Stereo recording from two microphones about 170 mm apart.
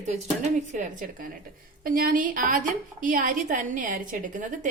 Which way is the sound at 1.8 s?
55° right (ahead or behind).